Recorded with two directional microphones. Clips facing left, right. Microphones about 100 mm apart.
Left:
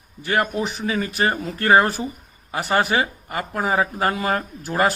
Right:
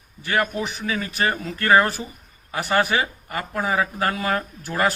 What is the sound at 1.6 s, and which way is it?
A man's voice, 20° left (ahead or behind).